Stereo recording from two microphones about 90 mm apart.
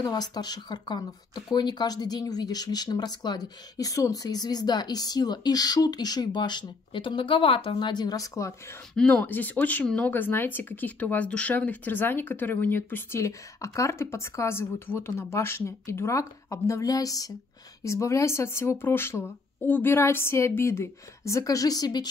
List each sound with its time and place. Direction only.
0.0 s speech: 50° left (ahead or behind); by 7.9 s 80° left
7.9 s speech: 50° left (ahead or behind)
8.9 s speech: 15° left (ahead or behind); by 22.0 s 45° left (ahead or behind)